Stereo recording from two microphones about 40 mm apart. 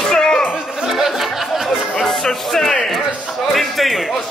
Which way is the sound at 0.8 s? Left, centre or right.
Centre.